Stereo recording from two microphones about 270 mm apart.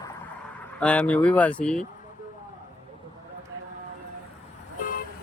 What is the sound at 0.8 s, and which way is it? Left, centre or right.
Speech, centre.